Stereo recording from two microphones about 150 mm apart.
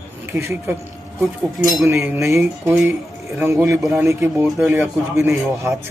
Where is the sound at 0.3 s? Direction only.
15° right (ahead or behind).